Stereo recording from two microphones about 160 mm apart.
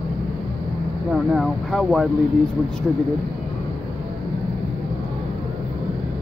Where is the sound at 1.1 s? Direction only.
Centre (ahead or behind).